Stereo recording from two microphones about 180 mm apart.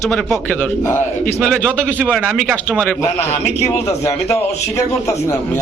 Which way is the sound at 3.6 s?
15° left (ahead or behind).